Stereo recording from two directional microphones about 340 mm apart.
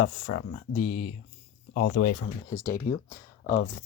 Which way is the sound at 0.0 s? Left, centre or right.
Centre.